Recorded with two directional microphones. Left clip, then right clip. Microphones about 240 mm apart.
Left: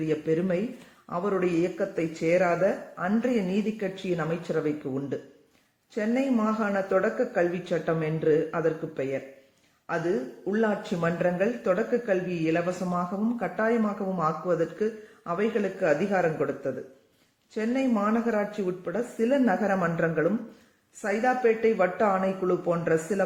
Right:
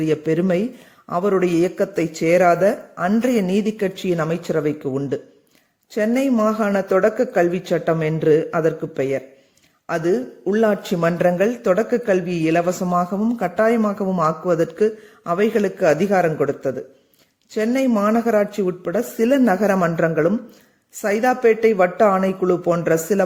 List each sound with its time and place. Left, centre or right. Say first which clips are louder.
0.0 s speech: right 7 dB; right
10.5 s speech: right 9 dB; right